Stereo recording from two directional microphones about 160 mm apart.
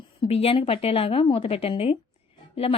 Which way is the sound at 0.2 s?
40° left (ahead or behind).